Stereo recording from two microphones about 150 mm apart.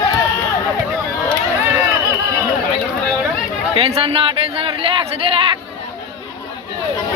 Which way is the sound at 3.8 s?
40° right (ahead or behind).